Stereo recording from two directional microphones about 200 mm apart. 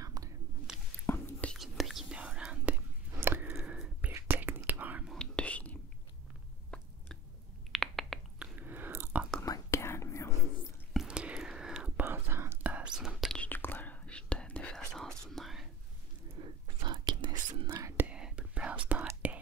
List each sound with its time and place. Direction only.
0.0 s whispering: 15° right (ahead or behind)
0.7 s a sound: 5° right (ahead or behind)
1.0 s whispering: 10° left (ahead or behind)
6.7 s a sound: 5° left (ahead or behind)
7.7 s chewing: centre (ahead or behind)
9.4 s whispering: 15° left (ahead or behind)
10.9 s whispering: 5° right (ahead or behind)
16.4 s biting: 25° right (ahead or behind)
16.8 s whispering: 20° right (ahead or behind)